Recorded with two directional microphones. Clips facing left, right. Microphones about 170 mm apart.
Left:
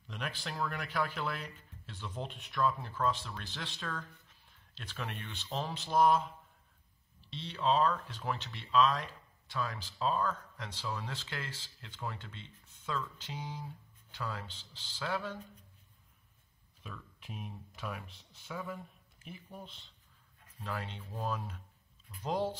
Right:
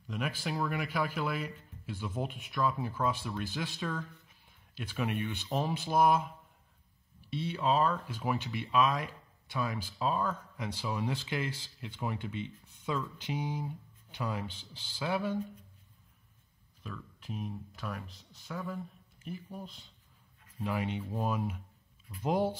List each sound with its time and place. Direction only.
0.1 s speech: 5° right (ahead or behind)
16.8 s speech: centre (ahead or behind)
18.0 s speech: 35° right (ahead or behind)
18.5 s speech: 5° left (ahead or behind)
20.6 s speech: 15° right (ahead or behind)